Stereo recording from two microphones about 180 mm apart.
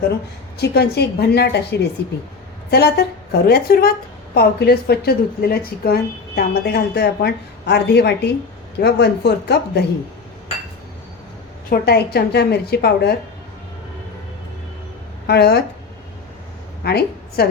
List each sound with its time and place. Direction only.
0.6 s speech: 65° left (ahead or behind)
11.7 s speech: 60° left (ahead or behind)
15.3 s speech: 65° left (ahead or behind)
16.8 s a woman's voice: 65° left (ahead or behind)